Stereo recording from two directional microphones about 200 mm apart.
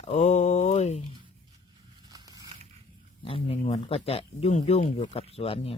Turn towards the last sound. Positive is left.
turn(degrees=30)  # may be behind; listen again after turning